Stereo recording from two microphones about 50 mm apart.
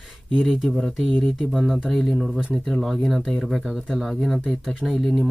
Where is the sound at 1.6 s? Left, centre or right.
Centre.